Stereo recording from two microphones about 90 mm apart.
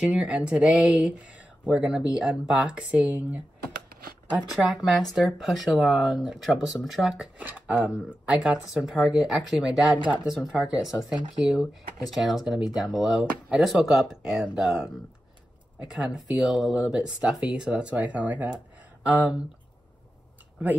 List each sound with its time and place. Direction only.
0.0 s speech: 15° right (ahead or behind)
4.5 s speech: 5° right (ahead or behind)
7.3 s speech: 15° right (ahead or behind)